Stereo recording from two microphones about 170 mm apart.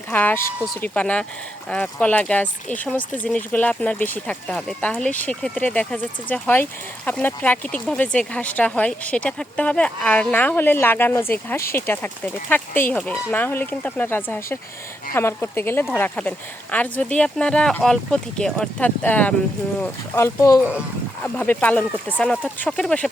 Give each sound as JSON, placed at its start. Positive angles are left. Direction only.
{"t": 0.1, "sound": "speech", "side_deg": 10}